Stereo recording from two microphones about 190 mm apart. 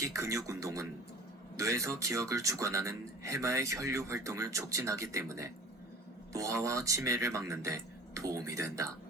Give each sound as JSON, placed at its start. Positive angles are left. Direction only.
{"t": 0.0, "sound": "a man's voice", "side_deg": -15}